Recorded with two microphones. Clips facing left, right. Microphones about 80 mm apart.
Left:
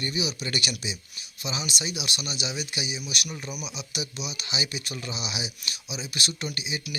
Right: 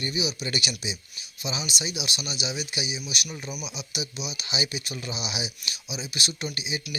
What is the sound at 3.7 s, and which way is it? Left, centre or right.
Speech, left.